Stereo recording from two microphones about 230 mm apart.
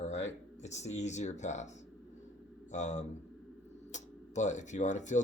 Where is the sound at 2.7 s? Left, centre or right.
Left.